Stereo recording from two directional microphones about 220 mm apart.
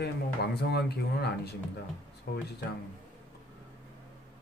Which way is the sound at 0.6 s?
50° left (ahead or behind).